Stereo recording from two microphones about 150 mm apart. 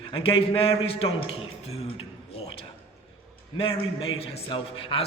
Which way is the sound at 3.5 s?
40° left (ahead or behind).